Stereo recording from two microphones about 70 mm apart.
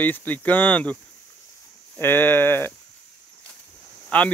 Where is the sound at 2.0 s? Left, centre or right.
Left.